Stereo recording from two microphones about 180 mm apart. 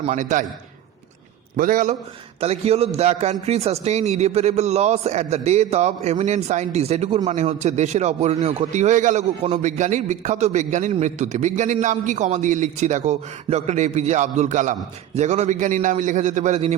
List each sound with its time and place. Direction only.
0.1 s a man's voice: 45° right (ahead or behind)
1.5 s a man's voice: 50° right (ahead or behind)
2.4 s a man's voice: 35° right (ahead or behind)